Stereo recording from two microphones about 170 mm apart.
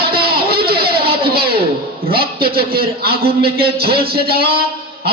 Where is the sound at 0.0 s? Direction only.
65° right (ahead or behind).